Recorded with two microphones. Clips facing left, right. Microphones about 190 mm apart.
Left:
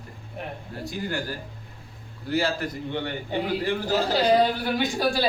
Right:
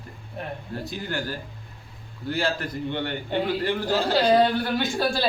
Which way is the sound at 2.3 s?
10° left (ahead or behind).